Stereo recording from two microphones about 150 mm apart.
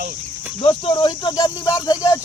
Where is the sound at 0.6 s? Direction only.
35° left (ahead or behind).